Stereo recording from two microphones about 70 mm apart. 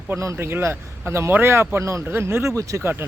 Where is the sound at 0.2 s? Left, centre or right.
Right.